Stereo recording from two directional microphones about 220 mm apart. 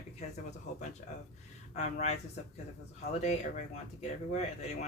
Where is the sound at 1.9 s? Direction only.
30° left (ahead or behind).